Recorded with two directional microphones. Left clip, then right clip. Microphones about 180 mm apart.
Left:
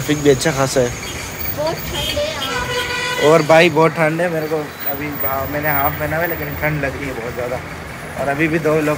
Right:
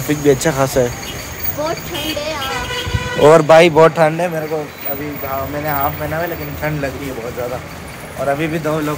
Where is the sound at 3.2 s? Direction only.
40° right (ahead or behind).